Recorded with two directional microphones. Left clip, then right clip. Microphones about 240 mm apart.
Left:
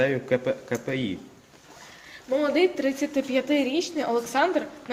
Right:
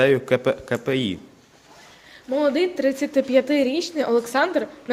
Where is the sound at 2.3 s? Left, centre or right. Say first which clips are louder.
Right 2 dB; right.